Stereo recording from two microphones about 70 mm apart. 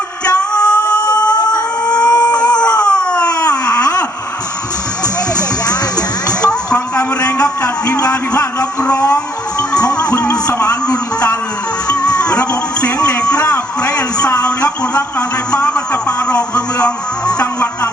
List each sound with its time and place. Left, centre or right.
0.3 s music: centre
1.1 s a sound: centre
5.4 s music: left
7.6 s a sound: left
9.0 s music: left
11.9 s music: centre
13.1 s a sound: centre
15.5 s speech: centre
17.3 s music: centre